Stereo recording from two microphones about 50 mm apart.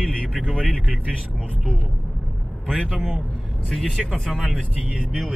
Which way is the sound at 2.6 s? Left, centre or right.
Centre.